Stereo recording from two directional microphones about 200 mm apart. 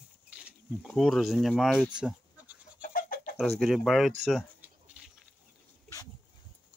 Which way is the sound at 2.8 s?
45° left (ahead or behind).